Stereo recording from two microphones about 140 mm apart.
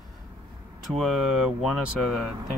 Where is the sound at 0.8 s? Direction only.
Centre (ahead or behind).